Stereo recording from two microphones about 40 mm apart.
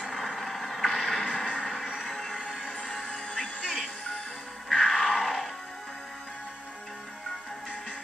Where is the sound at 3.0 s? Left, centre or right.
Left.